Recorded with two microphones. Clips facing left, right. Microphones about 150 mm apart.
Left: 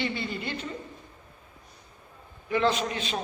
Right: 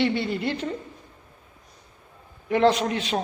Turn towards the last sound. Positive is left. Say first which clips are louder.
# right 5 dB
turn(degrees=-70)  # may be behind; listen again after turning